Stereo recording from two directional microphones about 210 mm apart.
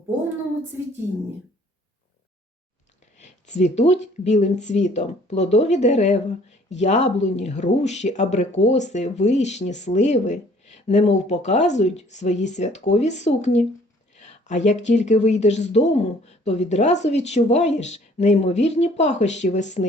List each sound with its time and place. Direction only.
3.2 s speech: 35° left (ahead or behind)